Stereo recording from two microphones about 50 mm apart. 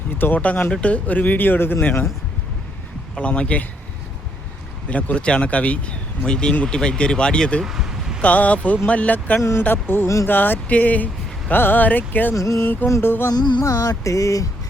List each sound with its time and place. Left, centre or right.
0.2 s speech: left
0.7 s speech: left
3.2 s speech: left
4.9 s speech: left
7.6 s a sound: centre
8.2 s speech: left
9.6 s speech: left
11.5 s speech: left
12.3 s music: left
13.0 s speech: left
13.7 s music: left